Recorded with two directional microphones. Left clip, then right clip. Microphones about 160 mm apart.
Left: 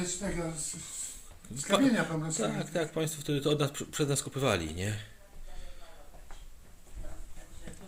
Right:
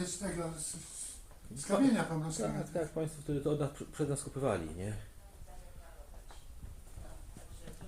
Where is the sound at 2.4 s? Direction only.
15° left (ahead or behind).